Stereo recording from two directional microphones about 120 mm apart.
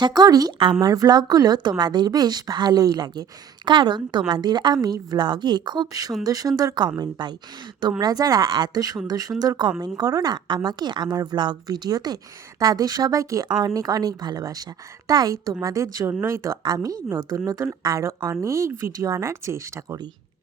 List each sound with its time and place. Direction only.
0.0 s a woman's voice: 35° right (ahead or behind)